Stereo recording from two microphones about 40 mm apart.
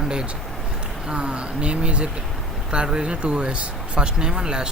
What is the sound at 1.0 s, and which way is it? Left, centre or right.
Speech, right.